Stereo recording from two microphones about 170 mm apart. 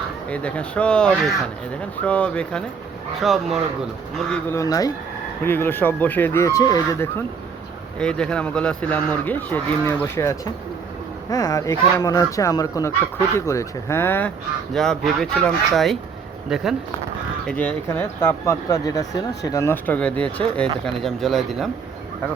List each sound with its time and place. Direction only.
0.3 s speech: 10° left (ahead or behind)
4.3 s speech: 15° left (ahead or behind)
7.9 s speech: 5° left (ahead or behind)